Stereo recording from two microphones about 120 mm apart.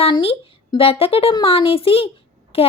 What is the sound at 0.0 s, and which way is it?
Speech, 55° left (ahead or behind).